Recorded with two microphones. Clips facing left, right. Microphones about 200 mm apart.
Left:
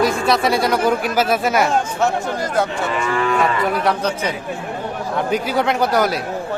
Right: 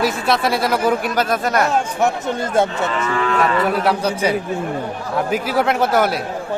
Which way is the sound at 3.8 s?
10° right (ahead or behind).